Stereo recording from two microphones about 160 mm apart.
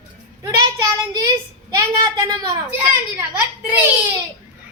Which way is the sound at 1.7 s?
25° right (ahead or behind).